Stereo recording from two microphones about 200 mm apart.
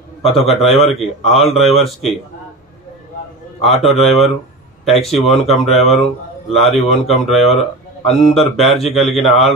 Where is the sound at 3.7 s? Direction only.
Centre (ahead or behind).